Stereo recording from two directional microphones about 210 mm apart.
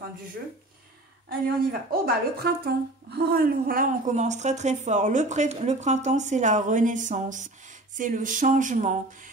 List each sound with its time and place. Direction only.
1.7 s speech: 45° right (ahead or behind)